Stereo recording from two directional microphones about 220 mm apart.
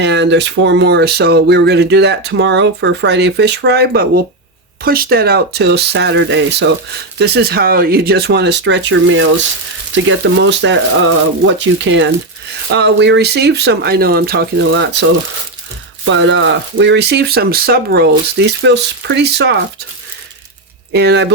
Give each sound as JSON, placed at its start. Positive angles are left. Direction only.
{"t": 0.0, "sound": "speech", "side_deg": -50}
{"t": 16.0, "sound": "speech", "side_deg": -55}
{"t": 20.9, "sound": "speech", "side_deg": -50}